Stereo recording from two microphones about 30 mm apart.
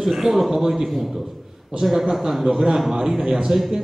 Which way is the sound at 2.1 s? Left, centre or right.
Centre.